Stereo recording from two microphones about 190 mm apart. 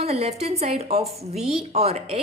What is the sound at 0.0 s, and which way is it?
A woman's voice, 35° right (ahead or behind).